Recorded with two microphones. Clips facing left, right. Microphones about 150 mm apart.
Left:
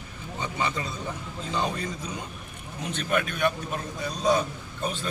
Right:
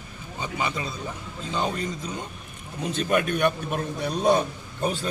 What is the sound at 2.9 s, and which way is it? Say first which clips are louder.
Speech: right 4 dB; 40° right (ahead or behind).